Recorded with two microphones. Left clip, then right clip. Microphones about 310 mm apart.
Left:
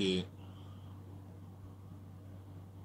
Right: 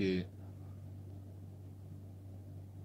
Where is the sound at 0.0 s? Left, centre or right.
Left.